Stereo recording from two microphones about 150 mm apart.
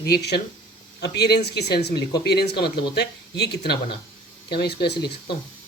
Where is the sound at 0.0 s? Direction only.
90° left.